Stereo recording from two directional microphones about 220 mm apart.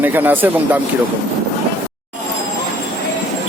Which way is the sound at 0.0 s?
10° right (ahead or behind).